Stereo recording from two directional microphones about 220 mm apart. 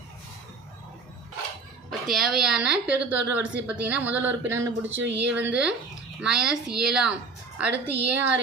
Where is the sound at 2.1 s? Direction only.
Centre (ahead or behind).